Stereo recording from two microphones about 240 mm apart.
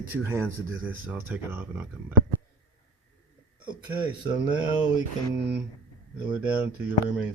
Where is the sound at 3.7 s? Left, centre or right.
Centre.